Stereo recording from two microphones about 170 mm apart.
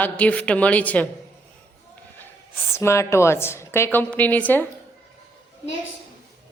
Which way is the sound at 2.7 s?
15° left (ahead or behind).